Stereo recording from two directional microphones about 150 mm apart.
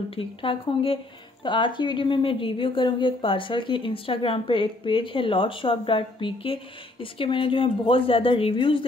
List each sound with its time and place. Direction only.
0.1 s speech: 35° left (ahead or behind)